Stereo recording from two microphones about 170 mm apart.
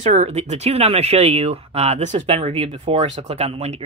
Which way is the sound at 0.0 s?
45° right (ahead or behind).